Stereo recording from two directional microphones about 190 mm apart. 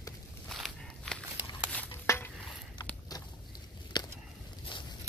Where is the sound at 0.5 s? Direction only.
Centre (ahead or behind).